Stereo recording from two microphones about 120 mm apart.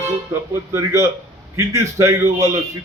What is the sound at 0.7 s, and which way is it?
A man's voice, 25° right (ahead or behind).